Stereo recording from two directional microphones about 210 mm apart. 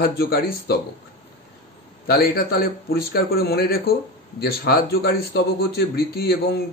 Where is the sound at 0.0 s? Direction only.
45° left (ahead or behind).